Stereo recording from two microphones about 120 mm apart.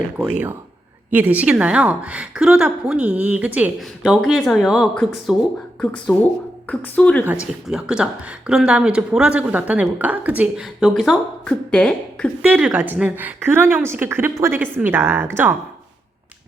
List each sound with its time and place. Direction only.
1.1 s speech: 15° right (ahead or behind)
5.8 s speech: 10° left (ahead or behind)
7.7 s speech: 5° right (ahead or behind)
11.4 s speech: 10° left (ahead or behind)
12.4 s speech: 10° right (ahead or behind)